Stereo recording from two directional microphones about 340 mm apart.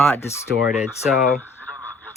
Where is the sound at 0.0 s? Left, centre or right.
Centre.